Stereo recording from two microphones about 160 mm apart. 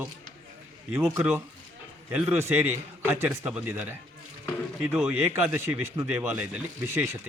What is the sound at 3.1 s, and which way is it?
Speech, 15° right (ahead or behind).